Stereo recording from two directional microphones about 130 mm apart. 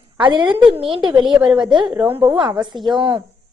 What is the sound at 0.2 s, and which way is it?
A woman's voice, 35° right (ahead or behind).